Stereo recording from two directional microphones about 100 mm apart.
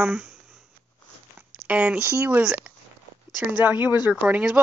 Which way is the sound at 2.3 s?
15° right (ahead or behind).